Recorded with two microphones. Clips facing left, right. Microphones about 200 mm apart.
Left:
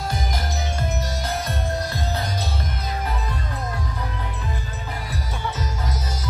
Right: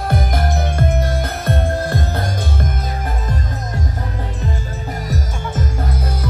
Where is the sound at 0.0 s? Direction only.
55° right (ahead or behind).